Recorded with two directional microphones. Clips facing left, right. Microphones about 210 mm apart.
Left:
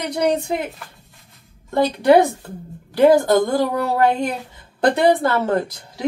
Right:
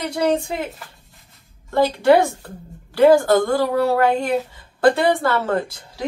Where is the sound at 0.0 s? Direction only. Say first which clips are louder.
Even; 20° left (ahead or behind).